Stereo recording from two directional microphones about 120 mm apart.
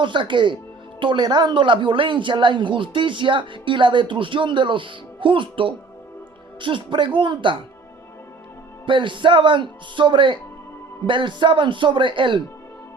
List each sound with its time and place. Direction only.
0.0 s a man's voice: 45° right (ahead or behind)
8.9 s a man's voice: 45° right (ahead or behind)